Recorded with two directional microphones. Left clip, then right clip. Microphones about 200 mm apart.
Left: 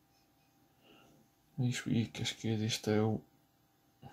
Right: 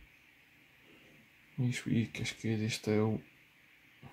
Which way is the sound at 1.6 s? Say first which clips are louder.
Right 1 dB; centre (ahead or behind).